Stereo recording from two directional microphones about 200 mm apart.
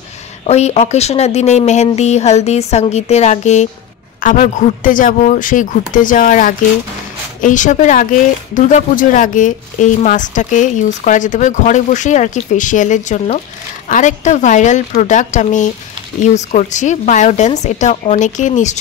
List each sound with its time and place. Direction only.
0.5 s speech: 35° left (ahead or behind)